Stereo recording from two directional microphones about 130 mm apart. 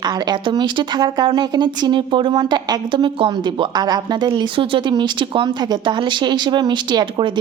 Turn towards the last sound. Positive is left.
turn(degrees=-35)  # may be behind; listen again after turning